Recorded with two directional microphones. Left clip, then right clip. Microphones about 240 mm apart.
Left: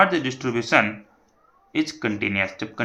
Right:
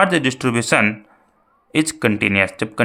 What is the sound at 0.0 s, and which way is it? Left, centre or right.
Speech, right.